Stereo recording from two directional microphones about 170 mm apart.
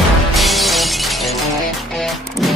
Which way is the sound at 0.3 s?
Centre (ahead or behind).